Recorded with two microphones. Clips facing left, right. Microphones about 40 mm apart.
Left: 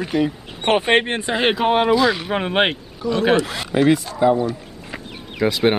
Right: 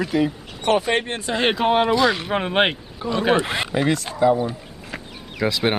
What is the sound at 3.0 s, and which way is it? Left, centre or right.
Speech, right.